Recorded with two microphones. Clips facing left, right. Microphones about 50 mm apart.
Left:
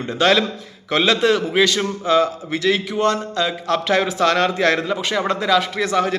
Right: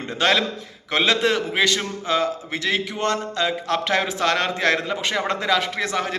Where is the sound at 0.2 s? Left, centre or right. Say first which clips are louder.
Left 3 dB; right.